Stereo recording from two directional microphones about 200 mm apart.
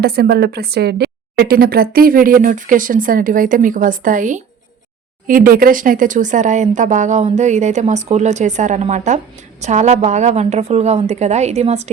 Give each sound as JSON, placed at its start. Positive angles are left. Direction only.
{"t": 0.0, "sound": "a woman's voice", "side_deg": -50}